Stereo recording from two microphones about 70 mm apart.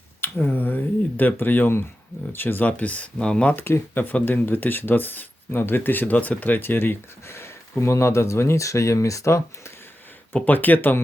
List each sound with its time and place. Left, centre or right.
0.2 s speech: left
3.5 s speech: left
10.3 s speech: left